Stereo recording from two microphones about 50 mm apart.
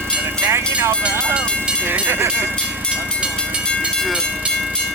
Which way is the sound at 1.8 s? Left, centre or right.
Right.